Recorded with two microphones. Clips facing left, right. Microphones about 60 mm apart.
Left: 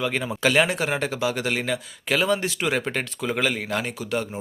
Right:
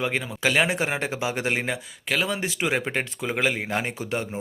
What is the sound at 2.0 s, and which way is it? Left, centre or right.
Speech, centre.